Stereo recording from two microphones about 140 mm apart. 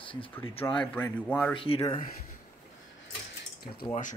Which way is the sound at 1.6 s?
40° left (ahead or behind).